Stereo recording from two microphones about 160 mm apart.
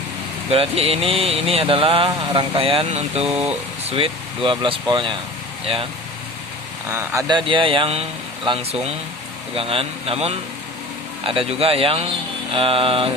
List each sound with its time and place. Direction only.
0.5 s speech: 35° right (ahead or behind)
3.2 s speech: 5° right (ahead or behind)
3.9 s speech: 35° right (ahead or behind)
6.9 s speech: 15° right (ahead or behind)
7.3 s speech: 30° right (ahead or behind)